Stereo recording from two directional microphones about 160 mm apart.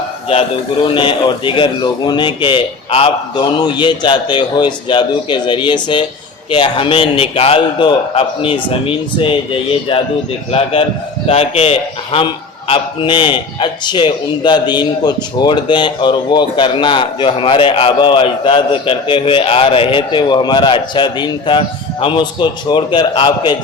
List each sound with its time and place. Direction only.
0.3 s a man's voice: 35° left (ahead or behind)